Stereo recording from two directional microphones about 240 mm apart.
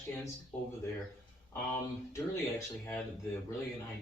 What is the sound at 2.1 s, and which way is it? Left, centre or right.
Speech, centre.